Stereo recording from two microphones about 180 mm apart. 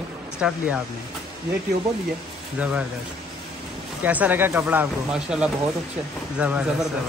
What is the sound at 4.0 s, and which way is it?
Speech, 10° right (ahead or behind).